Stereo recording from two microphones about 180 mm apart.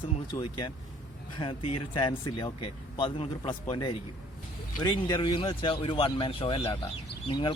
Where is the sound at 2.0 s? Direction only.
25° left (ahead or behind).